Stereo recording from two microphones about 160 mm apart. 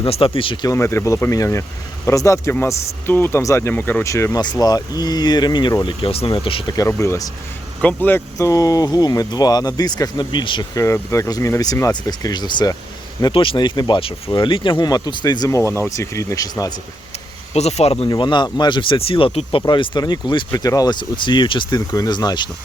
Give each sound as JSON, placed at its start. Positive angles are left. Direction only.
{"t": 0.0, "sound": "speech", "side_deg": 35}
{"t": 6.7, "sound": "speech", "side_deg": 20}
{"t": 17.5, "sound": "speech", "side_deg": 40}
{"t": 18.1, "sound": "speech", "side_deg": 30}